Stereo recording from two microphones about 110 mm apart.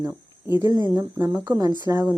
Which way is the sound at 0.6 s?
35° right (ahead or behind).